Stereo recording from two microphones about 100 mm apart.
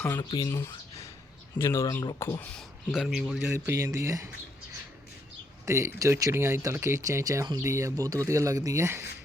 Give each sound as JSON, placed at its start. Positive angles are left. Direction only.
{"t": 0.2, "sound": "speech", "side_deg": 50}
{"t": 0.4, "sound": "speech", "side_deg": 25}
{"t": 2.9, "sound": "speech", "side_deg": -5}
{"t": 3.5, "sound": "speech", "side_deg": -25}
{"t": 5.6, "sound": "speech", "side_deg": -30}